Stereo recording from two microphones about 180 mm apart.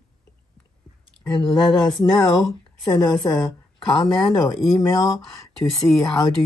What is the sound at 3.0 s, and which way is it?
Speech, 20° left (ahead or behind).